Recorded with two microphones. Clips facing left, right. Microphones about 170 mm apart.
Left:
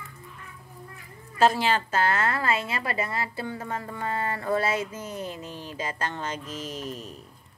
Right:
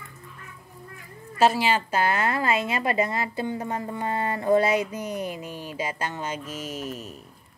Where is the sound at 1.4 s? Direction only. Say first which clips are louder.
Right 1 dB; 5° right (ahead or behind).